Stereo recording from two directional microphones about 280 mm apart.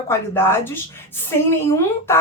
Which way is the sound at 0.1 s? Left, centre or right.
Centre.